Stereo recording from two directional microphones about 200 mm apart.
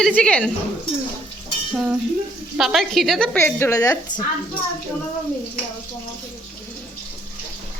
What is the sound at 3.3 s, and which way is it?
Speech, 10° left (ahead or behind).